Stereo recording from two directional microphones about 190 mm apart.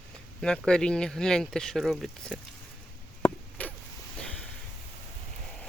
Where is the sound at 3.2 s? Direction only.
10° left (ahead or behind).